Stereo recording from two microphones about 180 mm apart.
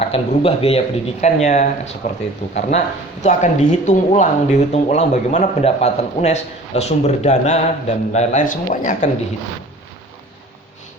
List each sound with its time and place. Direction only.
0.0 s speech: 35° left (ahead or behind)